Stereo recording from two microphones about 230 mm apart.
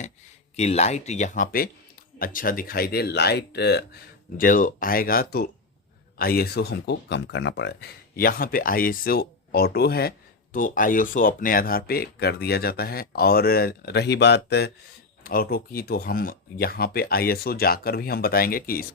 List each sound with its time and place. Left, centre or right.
0.5 s speech: left